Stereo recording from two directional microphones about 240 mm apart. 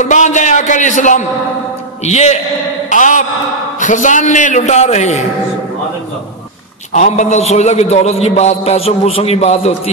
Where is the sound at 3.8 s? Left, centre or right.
Left.